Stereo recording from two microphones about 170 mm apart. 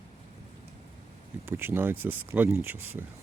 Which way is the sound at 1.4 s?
15° right (ahead or behind).